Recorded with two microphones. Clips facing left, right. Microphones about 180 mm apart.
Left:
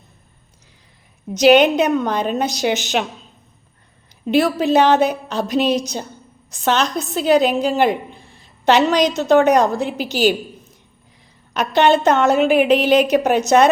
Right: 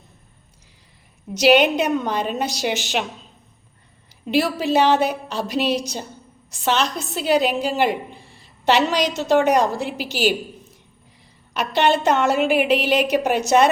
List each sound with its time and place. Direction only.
1.3 s a woman's voice: 45° left (ahead or behind)
4.3 s a woman's voice: 45° left (ahead or behind)
11.5 s a woman's voice: 45° left (ahead or behind)